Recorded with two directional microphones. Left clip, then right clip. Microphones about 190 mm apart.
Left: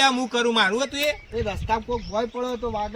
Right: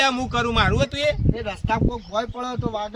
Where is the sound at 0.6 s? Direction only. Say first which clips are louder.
Right 1 dB; 25° right (ahead or behind).